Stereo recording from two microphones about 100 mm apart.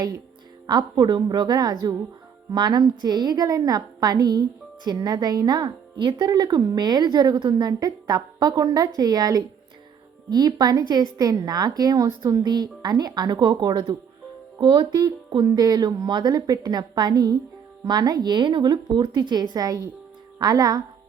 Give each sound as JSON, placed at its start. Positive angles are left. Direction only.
{"t": 0.7, "sound": "a woman's voice", "side_deg": -45}
{"t": 12.4, "sound": "a woman's voice", "side_deg": -45}